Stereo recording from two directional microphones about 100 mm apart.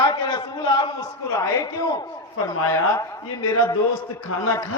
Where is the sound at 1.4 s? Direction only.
35° left (ahead or behind).